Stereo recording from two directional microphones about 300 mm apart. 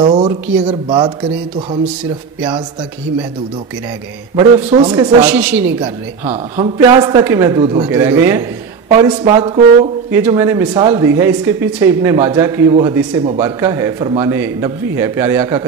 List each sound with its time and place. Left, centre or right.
0.0 s speech: centre
4.4 s speech: centre